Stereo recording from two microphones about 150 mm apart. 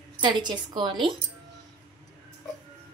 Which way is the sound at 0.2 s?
30° right (ahead or behind).